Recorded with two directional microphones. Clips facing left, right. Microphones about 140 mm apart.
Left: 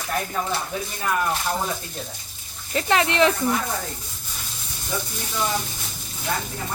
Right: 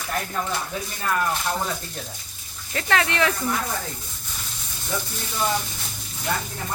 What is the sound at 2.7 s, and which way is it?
Speech, 20° left (ahead or behind).